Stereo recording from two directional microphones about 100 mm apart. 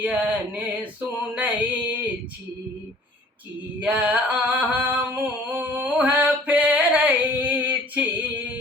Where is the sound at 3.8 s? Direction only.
10° right (ahead or behind).